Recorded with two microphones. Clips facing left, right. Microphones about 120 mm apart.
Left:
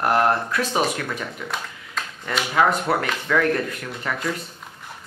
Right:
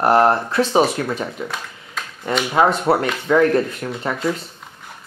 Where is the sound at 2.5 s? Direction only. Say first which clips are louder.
Right 3 dB; 30° right (ahead or behind).